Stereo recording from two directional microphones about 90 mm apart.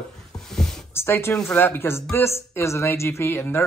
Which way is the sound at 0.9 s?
25° left (ahead or behind).